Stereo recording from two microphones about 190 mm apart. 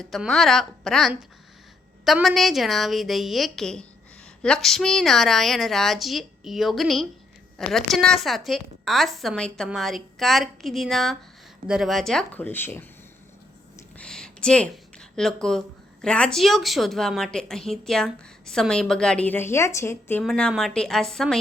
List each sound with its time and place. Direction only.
0.0 s speech: centre (ahead or behind)
14.0 s speech: 5° left (ahead or behind)